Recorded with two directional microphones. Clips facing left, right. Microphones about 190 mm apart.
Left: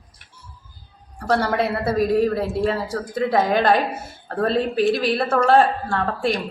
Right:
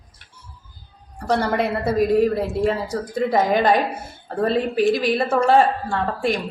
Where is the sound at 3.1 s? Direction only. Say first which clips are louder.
Even; 5° right (ahead or behind).